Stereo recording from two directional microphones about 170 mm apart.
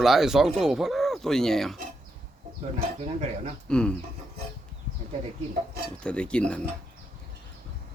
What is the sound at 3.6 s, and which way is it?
Speech, 5° left (ahead or behind).